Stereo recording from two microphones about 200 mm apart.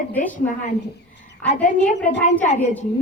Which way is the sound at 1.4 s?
10° left (ahead or behind).